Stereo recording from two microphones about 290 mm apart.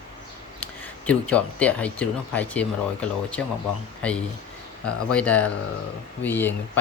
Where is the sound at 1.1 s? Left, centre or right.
Centre.